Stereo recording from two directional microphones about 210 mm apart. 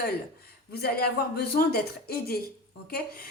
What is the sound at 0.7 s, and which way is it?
A woman's voice, 50° left (ahead or behind).